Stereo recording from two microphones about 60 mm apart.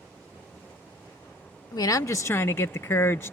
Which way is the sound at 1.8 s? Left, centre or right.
Left.